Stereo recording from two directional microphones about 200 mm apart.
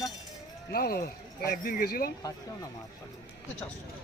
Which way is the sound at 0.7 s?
50° left (ahead or behind).